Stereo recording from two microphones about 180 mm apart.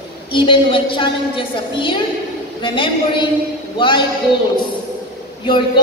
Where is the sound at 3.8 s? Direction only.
25° left (ahead or behind).